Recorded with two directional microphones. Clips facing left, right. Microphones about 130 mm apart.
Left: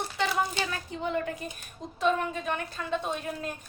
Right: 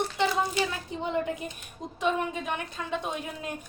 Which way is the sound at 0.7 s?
20° right (ahead or behind).